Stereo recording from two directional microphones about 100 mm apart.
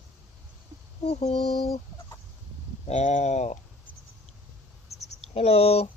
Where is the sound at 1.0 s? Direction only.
90° left.